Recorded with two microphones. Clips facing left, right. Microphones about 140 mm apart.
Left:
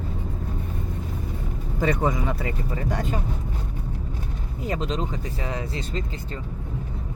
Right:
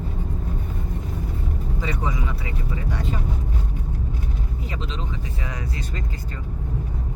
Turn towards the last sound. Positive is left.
turn(degrees=30)  # may be behind; listen again after turning